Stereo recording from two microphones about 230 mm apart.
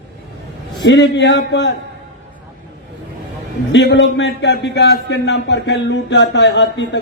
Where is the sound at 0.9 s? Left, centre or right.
Left.